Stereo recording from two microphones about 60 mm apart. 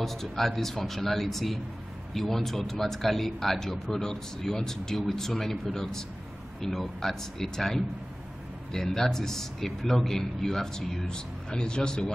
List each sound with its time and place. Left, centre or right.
0.0 s a man's voice: centre